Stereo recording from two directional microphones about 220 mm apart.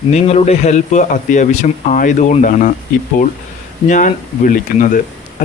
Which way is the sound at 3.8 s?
35° left (ahead or behind).